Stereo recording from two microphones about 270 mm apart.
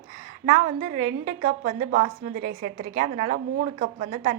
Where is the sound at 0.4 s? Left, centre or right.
Right.